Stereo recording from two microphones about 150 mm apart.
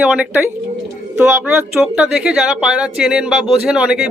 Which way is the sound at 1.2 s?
15° right (ahead or behind).